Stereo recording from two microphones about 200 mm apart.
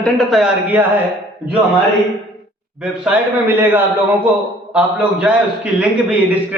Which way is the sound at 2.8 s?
5° right (ahead or behind).